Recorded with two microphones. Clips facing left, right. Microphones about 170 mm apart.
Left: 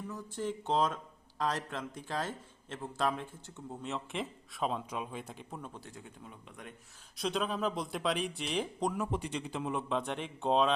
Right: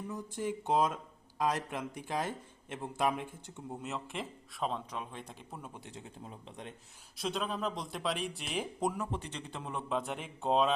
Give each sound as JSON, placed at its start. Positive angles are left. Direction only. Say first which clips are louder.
{"t": 0.1, "sound": "speech", "louder": "right 1 dB", "side_deg": -15}
{"t": 3.8, "sound": "a man's voice", "louder": "left 3 dB", "side_deg": 0}
{"t": 5.7, "sound": "speech", "louder": "right 1 dB", "side_deg": -20}
{"t": 7.2, "sound": "a man's voice", "louder": "left 2 dB", "side_deg": 0}
{"t": 9.0, "sound": "a man's voice", "louder": "left 4 dB", "side_deg": 10}